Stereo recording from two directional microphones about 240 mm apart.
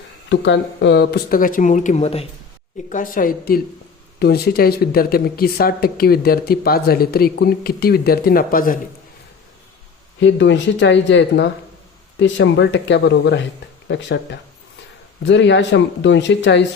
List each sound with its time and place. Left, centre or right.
0.3 s speech: left
10.2 s speech: left